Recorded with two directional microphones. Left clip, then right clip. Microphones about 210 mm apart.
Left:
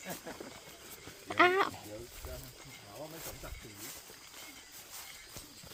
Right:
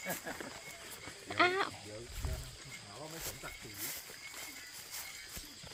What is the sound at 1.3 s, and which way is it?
Speech, 35° left (ahead or behind).